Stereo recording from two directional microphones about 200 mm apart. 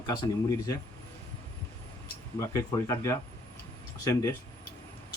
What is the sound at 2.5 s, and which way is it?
Speech, 15° left (ahead or behind).